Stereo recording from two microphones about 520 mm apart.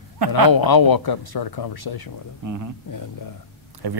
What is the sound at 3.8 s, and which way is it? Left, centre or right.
Speech, right.